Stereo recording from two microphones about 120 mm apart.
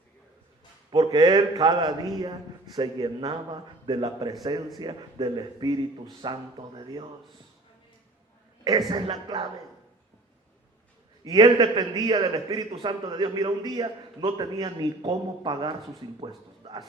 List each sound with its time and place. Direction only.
0.9 s a man's voice: 35° right (ahead or behind)
9.2 s a man's voice: 35° right (ahead or behind)
11.2 s a man's voice: 35° right (ahead or behind)